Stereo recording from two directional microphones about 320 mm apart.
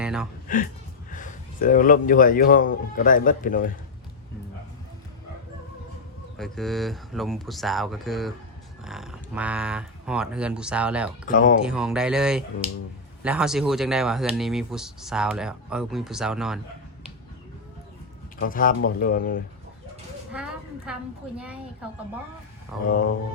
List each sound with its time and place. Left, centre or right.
0.0 s a sound: centre
0.4 s a man's voice: left
6.3 s speech: centre
11.3 s a man's voice: left
11.6 s speech: centre
18.3 s a man's voice: left
18.8 s speech: left
19.0 s a man's voice: left
20.3 s a sound: centre
21.3 s speech: centre
22.7 s speech: centre